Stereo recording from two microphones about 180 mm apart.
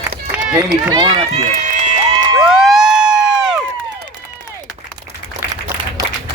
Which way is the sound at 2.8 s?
Centre (ahead or behind).